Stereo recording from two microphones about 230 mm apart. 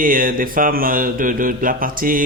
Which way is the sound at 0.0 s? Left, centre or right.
Right.